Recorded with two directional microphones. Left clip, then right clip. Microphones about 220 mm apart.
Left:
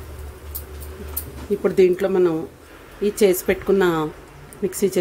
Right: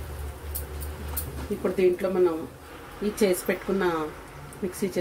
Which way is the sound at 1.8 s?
45° left (ahead or behind).